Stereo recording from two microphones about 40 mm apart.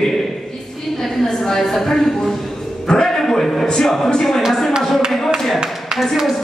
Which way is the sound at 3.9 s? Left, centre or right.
Centre.